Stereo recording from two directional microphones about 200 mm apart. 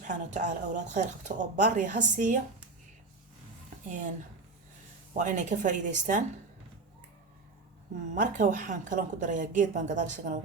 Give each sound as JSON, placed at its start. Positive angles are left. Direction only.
{"t": 0.0, "sound": "a woman's voice", "side_deg": -35}
{"t": 3.8, "sound": "a woman's voice", "side_deg": -40}
{"t": 5.1, "sound": "a woman's voice", "side_deg": -40}
{"t": 8.1, "sound": "a woman's voice", "side_deg": -40}